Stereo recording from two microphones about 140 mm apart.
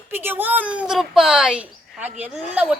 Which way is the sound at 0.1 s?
15° right (ahead or behind).